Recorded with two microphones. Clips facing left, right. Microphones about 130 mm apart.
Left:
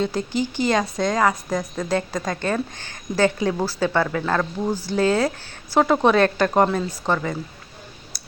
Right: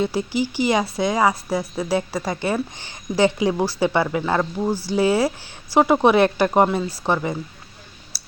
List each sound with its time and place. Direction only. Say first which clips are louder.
0.0 s a woman's voice: right 1 dB; 10° right (ahead or behind)